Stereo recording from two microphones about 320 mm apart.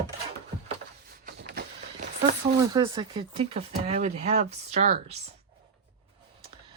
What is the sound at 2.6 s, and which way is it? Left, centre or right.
Speech, centre.